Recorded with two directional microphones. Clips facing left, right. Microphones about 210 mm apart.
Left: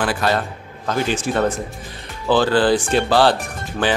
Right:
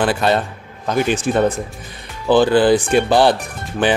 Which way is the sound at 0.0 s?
25° right (ahead or behind).